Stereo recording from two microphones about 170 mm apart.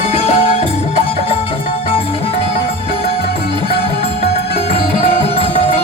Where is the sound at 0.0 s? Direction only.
35° left (ahead or behind).